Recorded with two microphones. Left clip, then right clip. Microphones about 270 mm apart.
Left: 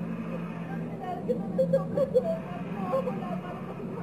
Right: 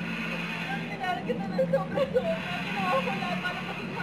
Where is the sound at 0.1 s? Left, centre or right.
Centre.